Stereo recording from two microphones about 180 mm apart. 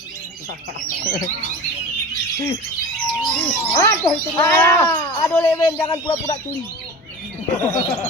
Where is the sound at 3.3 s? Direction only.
5° left (ahead or behind).